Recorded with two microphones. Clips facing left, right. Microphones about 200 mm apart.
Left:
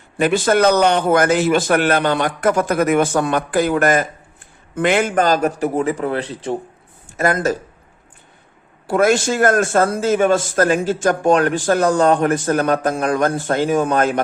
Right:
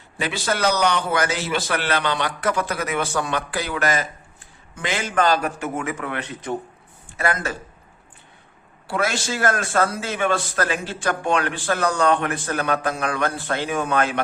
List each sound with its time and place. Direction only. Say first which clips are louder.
0.2 s a man's voice: left 9 dB; 50° left (ahead or behind); by 6.6 s 30° left (ahead or behind)
7.2 s a man's voice: left 7 dB; 40° left (ahead or behind)
8.9 s a man's voice: left 9 dB; 50° left (ahead or behind)